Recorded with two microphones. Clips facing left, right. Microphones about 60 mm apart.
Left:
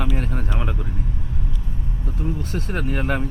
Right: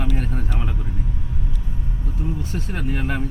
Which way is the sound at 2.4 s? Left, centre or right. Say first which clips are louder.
Left 2 dB; left.